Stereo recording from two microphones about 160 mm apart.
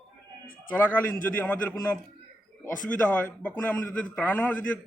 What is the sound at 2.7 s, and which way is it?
Speech, 55° left (ahead or behind).